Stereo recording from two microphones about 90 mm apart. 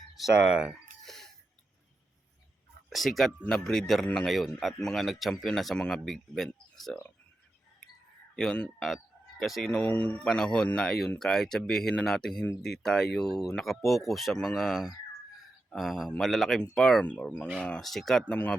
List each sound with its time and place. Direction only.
0.2 s speech: 10° right (ahead or behind)
1.0 s cough: 5° left (ahead or behind)
2.9 s speech: centre (ahead or behind)
8.4 s speech: 10° left (ahead or behind)